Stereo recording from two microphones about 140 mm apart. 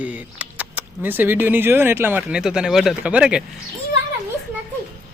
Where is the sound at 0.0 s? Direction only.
10° right (ahead or behind).